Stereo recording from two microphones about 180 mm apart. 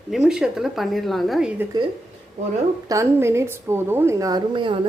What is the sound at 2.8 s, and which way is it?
A woman's voice, 15° right (ahead or behind).